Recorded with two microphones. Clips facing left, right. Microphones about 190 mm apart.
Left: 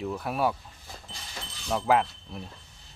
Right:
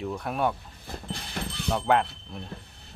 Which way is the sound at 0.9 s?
60° right (ahead or behind).